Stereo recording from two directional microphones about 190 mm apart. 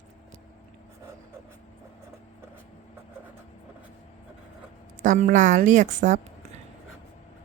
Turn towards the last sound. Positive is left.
turn(degrees=-40)  # may be behind; listen again after turning